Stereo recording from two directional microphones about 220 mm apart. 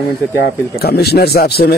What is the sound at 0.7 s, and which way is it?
Speech, 45° left (ahead or behind).